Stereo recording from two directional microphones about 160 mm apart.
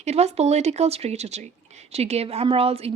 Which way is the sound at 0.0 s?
45° right (ahead or behind).